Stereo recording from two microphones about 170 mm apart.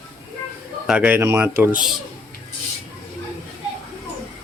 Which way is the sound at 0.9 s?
5° right (ahead or behind).